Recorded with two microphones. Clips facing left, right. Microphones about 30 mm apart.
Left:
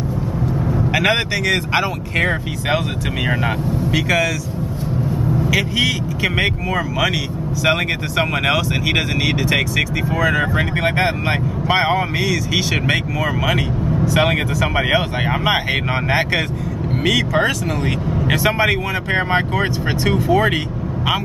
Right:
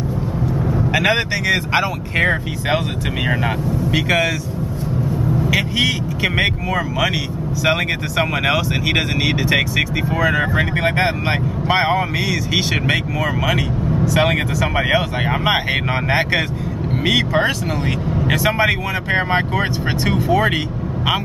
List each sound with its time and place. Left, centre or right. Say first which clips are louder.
0.7 s speech: even; centre
3.9 s speech: even; centre
5.5 s speech: even; centre
12.8 s speech: even; centre
15.4 s speech: right 1 dB; centre
17.0 s speech: even; centre
17.8 s speech: even; centre